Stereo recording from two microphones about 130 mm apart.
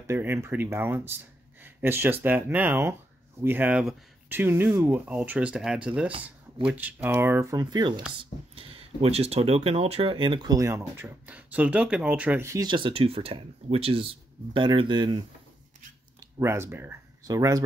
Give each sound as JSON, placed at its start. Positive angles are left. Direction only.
{"t": 0.0, "sound": "speech", "side_deg": -20}
{"t": 8.5, "sound": "speech", "side_deg": -45}
{"t": 12.6, "sound": "speech", "side_deg": -40}
{"t": 16.3, "sound": "speech", "side_deg": -20}